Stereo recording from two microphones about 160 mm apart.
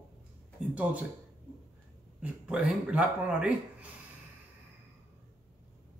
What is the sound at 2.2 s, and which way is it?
Speech, 5° right (ahead or behind).